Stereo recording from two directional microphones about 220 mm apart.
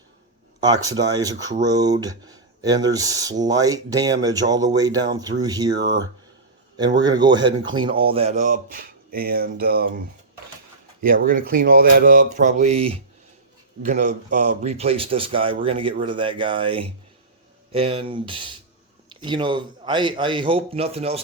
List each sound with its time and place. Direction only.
0.6 s speech: 15° right (ahead or behind); by 10.0 s 45° right (ahead or behind)
11.0 s a man's voice: 40° right (ahead or behind)